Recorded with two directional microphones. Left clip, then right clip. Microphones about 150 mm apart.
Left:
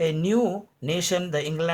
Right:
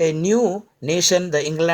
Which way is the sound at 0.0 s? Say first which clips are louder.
Right 6 dB; 35° right (ahead or behind).